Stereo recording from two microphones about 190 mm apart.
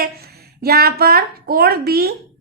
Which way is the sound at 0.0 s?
55° right (ahead or behind).